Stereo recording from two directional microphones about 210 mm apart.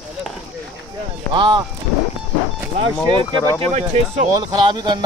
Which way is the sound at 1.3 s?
25° right (ahead or behind).